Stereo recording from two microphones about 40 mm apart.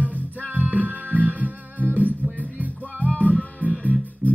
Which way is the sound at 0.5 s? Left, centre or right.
Right.